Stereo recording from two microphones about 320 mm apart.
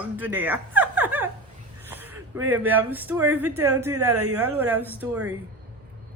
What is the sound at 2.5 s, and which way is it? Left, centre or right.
Speech, centre.